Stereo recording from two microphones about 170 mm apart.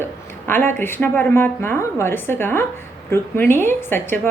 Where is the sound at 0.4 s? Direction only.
15° left (ahead or behind).